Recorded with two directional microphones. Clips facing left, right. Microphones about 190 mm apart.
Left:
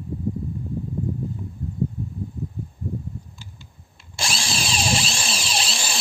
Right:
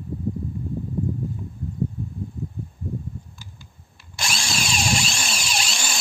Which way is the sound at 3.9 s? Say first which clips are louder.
Left 1 dB; 25° left (ahead or behind).